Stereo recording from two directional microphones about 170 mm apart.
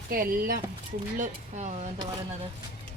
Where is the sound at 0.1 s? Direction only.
55° right (ahead or behind).